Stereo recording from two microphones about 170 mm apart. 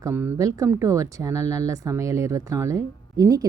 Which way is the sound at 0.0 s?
15° right (ahead or behind).